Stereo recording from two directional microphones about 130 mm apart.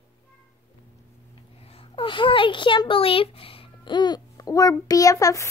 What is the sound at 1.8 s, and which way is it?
A child's voice, 40° left (ahead or behind).